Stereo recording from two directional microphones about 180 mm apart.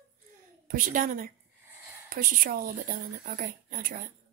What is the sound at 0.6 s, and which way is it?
Speech, 50° right (ahead or behind).